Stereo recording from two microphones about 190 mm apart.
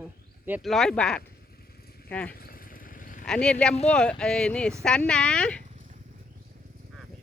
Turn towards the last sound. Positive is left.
turn(degrees=5)  # may be behind; listen again after turning